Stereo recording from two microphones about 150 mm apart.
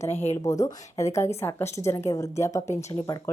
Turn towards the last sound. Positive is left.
turn(degrees=20)  # may be behind; listen again after turning